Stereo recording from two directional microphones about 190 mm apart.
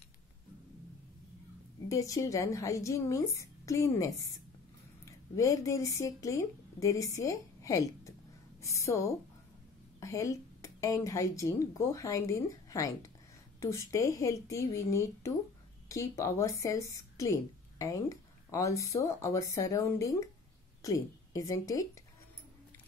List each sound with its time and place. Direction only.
1.9 s a woman's voice: 15° left (ahead or behind)
5.3 s a woman's voice: 15° left (ahead or behind)